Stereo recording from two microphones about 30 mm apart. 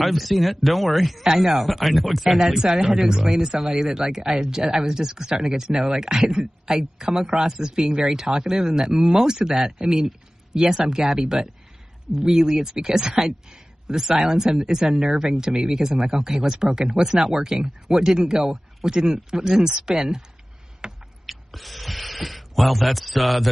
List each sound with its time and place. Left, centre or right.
0.0 s speech: centre
1.2 s speech: centre
1.7 s speech: centre
2.3 s speech: centre
10.0 s a sound: centre
10.9 s speech: centre
20.8 s a sound: right
21.3 s speech: centre